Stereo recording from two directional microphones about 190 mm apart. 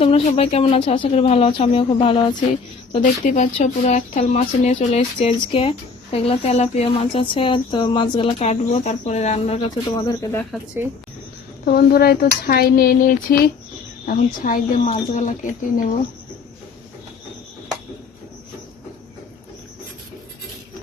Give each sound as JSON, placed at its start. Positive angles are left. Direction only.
{"t": 0.0, "sound": "speech", "side_deg": 30}
{"t": 2.9, "sound": "speech", "side_deg": 40}
{"t": 9.9, "sound": "speech", "side_deg": 20}
{"t": 11.6, "sound": "speech", "side_deg": 55}